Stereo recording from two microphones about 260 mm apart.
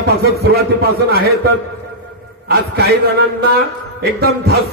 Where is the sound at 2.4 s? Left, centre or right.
Right.